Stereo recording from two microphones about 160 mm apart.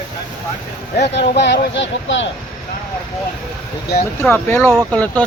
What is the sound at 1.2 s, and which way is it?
Speech, 90° left.